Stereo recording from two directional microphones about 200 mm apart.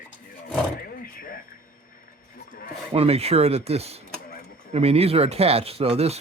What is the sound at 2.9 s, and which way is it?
Speech, 30° right (ahead or behind).